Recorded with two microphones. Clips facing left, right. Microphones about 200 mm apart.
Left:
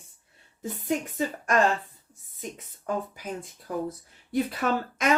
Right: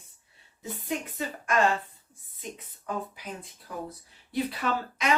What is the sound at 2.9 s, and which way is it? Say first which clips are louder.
Speech: left 4 dB; 50° left (ahead or behind).